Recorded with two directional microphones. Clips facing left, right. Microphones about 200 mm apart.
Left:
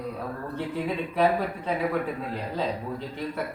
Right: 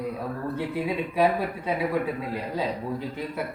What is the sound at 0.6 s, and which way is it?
A man's voice, 10° right (ahead or behind).